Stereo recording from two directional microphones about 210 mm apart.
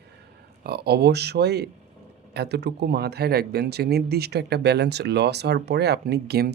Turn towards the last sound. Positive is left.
turn(degrees=-50)  # may be behind; listen again after turning